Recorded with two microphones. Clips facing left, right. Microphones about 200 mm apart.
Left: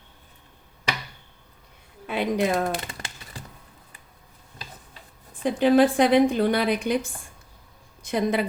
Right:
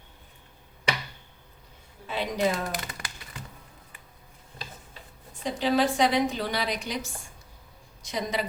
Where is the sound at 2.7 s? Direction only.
25° left (ahead or behind).